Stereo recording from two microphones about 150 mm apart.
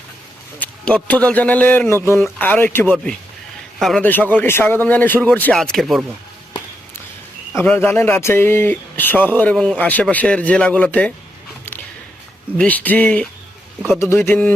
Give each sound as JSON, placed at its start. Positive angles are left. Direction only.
{"t": 0.6, "sound": "speech", "side_deg": 5}
{"t": 7.5, "sound": "speech", "side_deg": 10}
{"t": 12.5, "sound": "speech", "side_deg": 10}